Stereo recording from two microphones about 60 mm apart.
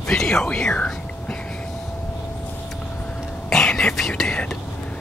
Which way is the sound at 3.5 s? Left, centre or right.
Centre.